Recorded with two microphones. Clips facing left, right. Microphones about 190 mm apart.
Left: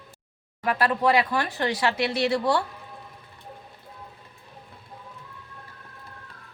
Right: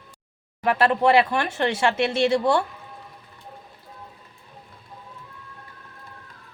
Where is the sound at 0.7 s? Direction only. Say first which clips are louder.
Right 4 dB; 25° right (ahead or behind).